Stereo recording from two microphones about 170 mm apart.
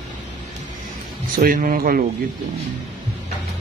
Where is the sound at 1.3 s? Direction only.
55° right (ahead or behind).